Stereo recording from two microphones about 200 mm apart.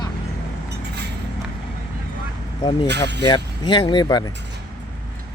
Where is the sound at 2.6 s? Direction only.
25° left (ahead or behind).